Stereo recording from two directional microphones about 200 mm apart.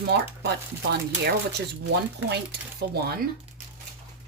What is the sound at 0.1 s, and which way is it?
Speech, 55° right (ahead or behind).